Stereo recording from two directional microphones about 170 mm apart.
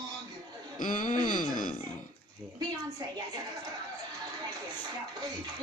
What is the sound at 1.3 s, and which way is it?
Wail, 50° left (ahead or behind).